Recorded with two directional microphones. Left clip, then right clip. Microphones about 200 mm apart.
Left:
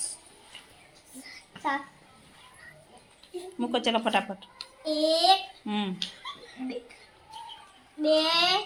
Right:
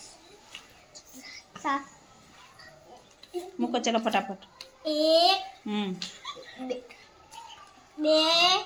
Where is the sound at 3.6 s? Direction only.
5° left (ahead or behind).